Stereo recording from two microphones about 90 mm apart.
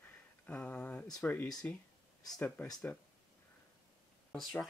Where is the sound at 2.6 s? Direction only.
20° left (ahead or behind).